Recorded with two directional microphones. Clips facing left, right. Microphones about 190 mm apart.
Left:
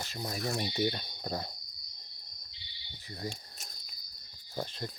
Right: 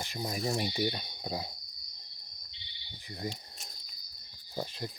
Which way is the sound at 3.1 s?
20° right (ahead or behind).